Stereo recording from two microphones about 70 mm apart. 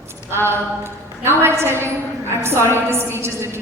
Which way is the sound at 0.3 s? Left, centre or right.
Right.